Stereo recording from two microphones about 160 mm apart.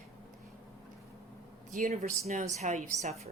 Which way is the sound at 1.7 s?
55° right (ahead or behind).